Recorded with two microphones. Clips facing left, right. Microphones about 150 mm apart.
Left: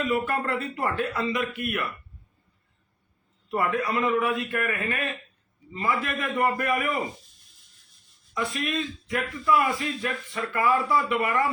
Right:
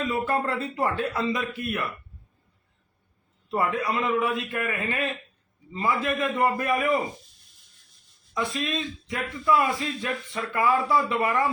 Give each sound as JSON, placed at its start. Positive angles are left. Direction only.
{"t": 0.1, "sound": "a man's voice", "side_deg": -25}
{"t": 3.5, "sound": "a man's voice", "side_deg": -20}
{"t": 8.4, "sound": "a man's voice", "side_deg": -25}